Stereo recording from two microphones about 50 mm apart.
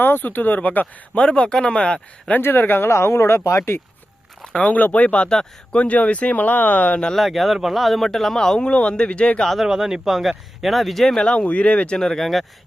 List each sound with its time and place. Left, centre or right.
0.0 s speech: left
1.1 s speech: left
2.4 s speech: left
2.9 s speech: left
4.4 s speech: centre
4.7 s speech: left
7.2 s speech: centre
9.6 s speech: centre
11.2 s speech: left
11.9 s speech: centre